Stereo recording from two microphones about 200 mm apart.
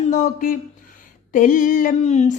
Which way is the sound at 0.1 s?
40° left (ahead or behind).